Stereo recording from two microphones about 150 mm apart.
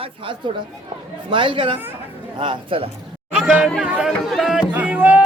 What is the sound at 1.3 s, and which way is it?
Speech, 35° right (ahead or behind).